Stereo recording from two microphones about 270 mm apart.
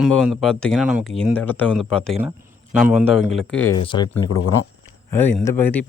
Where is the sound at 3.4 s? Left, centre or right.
Left.